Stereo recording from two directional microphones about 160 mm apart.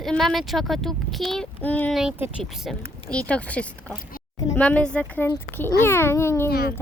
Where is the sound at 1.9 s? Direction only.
5° right (ahead or behind).